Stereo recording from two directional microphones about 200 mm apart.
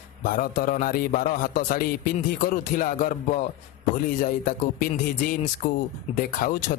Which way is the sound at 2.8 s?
40° left (ahead or behind).